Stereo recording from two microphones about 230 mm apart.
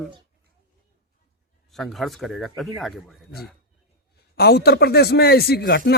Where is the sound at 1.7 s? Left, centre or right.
Centre.